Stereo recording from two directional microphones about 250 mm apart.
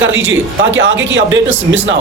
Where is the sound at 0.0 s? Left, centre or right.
Right.